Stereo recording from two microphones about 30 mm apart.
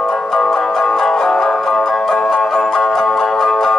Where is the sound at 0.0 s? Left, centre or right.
Centre.